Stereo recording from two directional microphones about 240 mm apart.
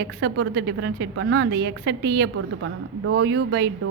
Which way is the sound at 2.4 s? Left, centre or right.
Right.